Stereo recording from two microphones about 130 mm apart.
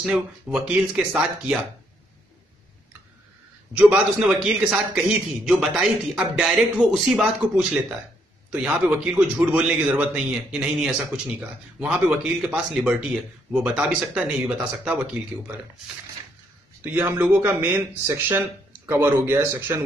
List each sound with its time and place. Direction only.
0.0 s speech: 10° right (ahead or behind)
3.9 s a man's voice: 5° right (ahead or behind)
16.8 s speech: 15° right (ahead or behind)